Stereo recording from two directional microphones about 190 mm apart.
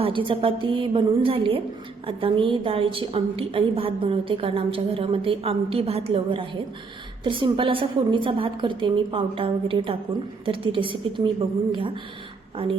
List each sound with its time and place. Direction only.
0.0 s a woman's voice: 25° right (ahead or behind)
12.6 s a woman's voice: 30° right (ahead or behind)